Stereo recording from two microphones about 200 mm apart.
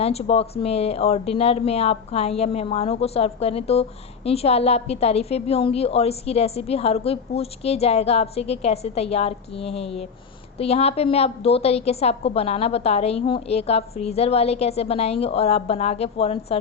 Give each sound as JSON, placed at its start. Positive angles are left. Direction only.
{"t": 0.0, "sound": "speech", "side_deg": 30}